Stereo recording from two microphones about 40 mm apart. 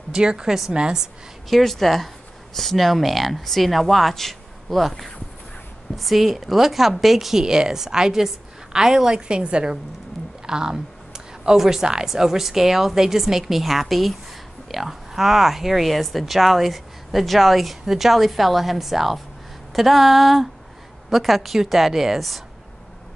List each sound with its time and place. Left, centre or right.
0.1 s a woman's voice: right
1.5 s speech: centre
7.4 s a woman's voice: centre